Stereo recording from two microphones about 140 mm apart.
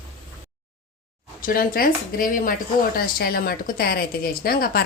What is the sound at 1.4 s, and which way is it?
Speech, 90° left.